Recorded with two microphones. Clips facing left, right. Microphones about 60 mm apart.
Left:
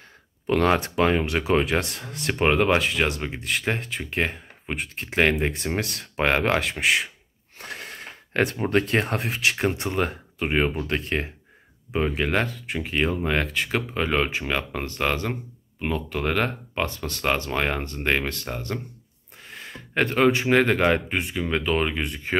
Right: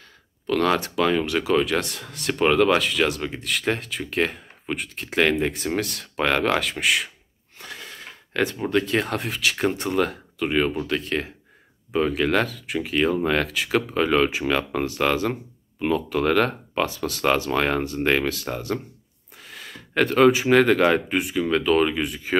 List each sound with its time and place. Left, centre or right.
0.5 s speech: left; by 5.9 s centre
6.1 s speech: left
7.5 s gasp: left
9.3 s speech: centre
11.9 s speech: centre
19.4 s a sound: centre
20.4 s speech: centre
21.5 s speech: centre